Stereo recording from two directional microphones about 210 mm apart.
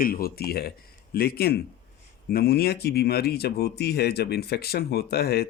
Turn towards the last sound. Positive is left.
turn(degrees=50)  # may be behind; listen again after turning